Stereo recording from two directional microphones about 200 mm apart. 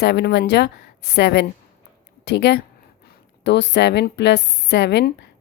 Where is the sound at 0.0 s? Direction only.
55° left (ahead or behind).